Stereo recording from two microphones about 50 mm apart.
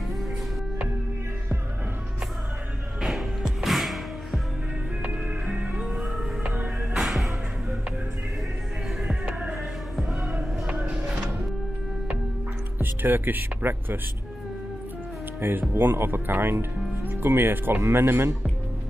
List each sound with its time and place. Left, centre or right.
3.0 s music: centre
5.5 s music: centre
12.7 s speech: right
15.7 s a man's voice: right